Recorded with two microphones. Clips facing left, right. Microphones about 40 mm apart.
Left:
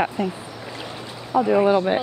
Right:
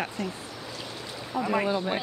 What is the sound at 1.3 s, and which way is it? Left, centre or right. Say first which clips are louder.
Speech: left 10 dB; left.